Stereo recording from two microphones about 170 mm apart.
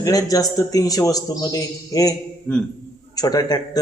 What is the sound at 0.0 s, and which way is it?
A man's voice, 20° left (ahead or behind).